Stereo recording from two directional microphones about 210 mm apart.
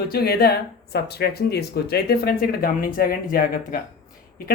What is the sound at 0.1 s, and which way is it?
Speech, 45° left (ahead or behind).